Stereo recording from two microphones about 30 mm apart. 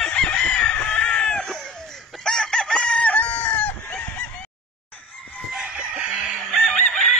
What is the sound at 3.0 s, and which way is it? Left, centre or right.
Chicken, left.